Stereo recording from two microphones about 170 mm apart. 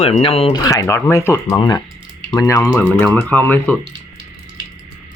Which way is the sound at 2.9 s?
5° left (ahead or behind).